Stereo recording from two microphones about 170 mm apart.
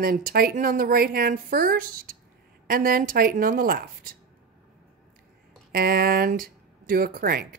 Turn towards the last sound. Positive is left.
turn(degrees=-55)  # may be behind; listen again after turning